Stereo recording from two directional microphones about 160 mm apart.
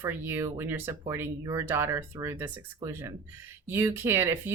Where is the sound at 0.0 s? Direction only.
15° right (ahead or behind).